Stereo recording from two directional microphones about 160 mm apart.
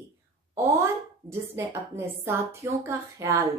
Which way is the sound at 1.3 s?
15° right (ahead or behind).